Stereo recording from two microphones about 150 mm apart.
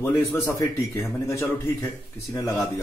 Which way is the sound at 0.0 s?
25° left (ahead or behind).